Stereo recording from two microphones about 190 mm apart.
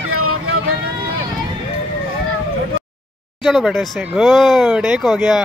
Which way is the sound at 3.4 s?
Centre (ahead or behind).